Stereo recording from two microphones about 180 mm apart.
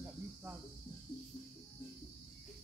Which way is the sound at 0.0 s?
10° right (ahead or behind).